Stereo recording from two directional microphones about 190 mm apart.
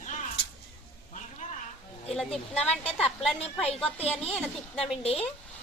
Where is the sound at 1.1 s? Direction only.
40° left (ahead or behind).